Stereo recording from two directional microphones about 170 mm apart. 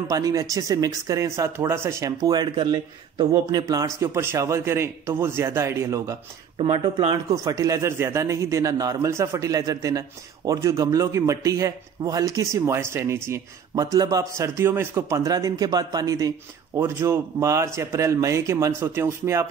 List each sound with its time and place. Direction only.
0.1 s speech: 20° right (ahead or behind)
6.6 s speech: 30° right (ahead or behind)
7.2 s speech: 20° right (ahead or behind)